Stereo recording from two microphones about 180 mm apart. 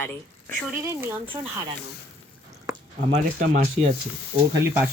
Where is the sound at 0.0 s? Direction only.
10° left (ahead or behind).